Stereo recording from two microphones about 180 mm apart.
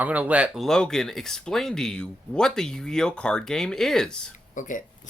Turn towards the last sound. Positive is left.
turn(degrees=45)  # may be behind; listen again after turning